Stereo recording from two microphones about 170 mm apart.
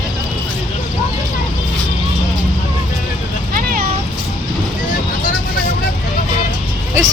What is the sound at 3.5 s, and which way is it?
Vehicle, 55° right (ahead or behind).